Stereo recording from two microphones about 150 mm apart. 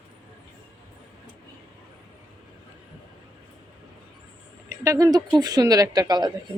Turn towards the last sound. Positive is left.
turn(degrees=-25)  # may be behind; listen again after turning